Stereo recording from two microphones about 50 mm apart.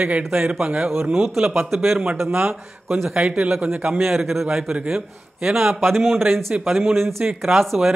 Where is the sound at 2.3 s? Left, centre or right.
Right.